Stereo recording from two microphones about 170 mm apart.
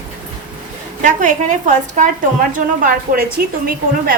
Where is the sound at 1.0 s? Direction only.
50° right (ahead or behind).